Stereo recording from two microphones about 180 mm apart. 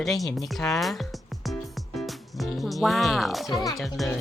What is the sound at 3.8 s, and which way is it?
Speech, centre (ahead or behind).